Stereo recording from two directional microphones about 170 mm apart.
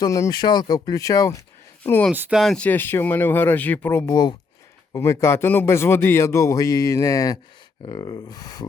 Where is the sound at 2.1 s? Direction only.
10° right (ahead or behind).